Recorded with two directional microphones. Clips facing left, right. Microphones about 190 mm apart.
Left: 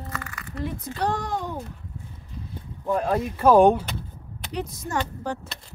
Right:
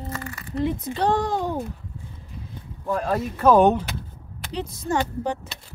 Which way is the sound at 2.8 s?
15° left (ahead or behind).